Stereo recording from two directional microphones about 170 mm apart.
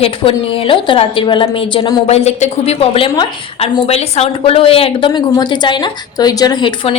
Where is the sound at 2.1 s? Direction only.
40° left (ahead or behind).